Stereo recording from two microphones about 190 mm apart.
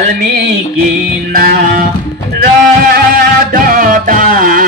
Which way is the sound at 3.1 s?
50° right (ahead or behind).